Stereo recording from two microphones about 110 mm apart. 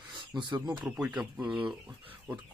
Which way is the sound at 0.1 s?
45° right (ahead or behind).